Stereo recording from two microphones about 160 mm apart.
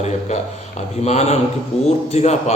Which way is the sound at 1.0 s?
45° left (ahead or behind).